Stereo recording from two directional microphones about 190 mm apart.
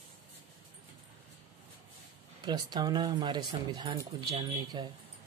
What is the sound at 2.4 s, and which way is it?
Speech, 20° right (ahead or behind).